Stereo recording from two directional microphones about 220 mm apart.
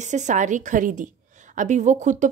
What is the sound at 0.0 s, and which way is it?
Speech, 35° right (ahead or behind).